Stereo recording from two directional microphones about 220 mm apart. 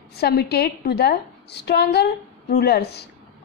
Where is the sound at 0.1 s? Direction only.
45° left (ahead or behind).